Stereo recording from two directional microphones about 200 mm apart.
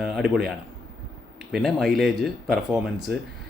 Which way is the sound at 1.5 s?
Centre (ahead or behind).